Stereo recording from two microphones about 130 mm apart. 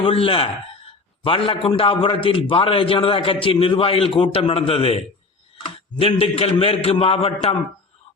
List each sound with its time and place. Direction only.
0.0 s a man's voice: 45° left (ahead or behind)